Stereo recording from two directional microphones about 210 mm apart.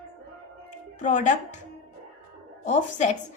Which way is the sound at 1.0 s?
35° left (ahead or behind).